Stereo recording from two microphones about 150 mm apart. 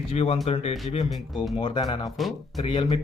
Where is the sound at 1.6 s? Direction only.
30° left (ahead or behind).